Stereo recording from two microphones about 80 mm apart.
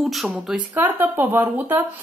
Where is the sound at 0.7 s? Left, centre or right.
Right.